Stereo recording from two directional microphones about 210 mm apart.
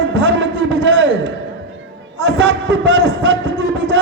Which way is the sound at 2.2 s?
60° right (ahead or behind).